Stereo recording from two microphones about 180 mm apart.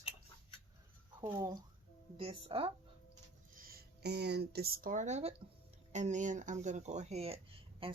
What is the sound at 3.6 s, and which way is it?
Speech, 55° right (ahead or behind).